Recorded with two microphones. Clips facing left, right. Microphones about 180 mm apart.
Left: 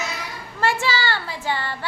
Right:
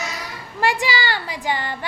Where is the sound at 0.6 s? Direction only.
15° right (ahead or behind).